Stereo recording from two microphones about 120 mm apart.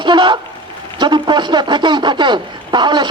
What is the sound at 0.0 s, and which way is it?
Speech, 40° right (ahead or behind).